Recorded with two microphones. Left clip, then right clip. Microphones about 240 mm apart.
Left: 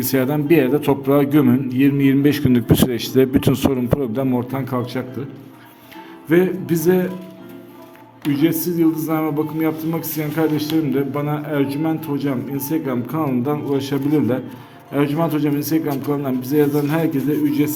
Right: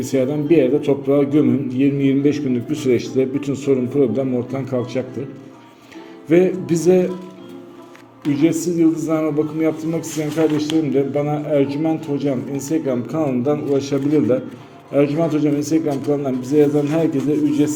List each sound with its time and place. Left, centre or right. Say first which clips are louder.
0.0 s a man's voice: even; left
6.2 s a man's voice: right 2 dB; centre
8.3 s a man's voice: right 1 dB; centre